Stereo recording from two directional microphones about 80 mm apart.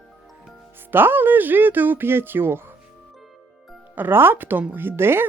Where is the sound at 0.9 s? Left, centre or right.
Right.